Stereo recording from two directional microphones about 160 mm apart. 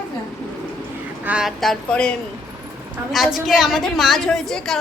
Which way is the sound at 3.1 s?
Centre (ahead or behind).